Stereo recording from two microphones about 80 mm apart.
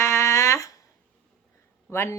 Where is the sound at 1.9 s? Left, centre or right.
Left.